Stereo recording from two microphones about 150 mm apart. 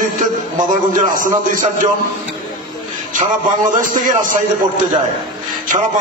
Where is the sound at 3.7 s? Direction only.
60° right (ahead or behind).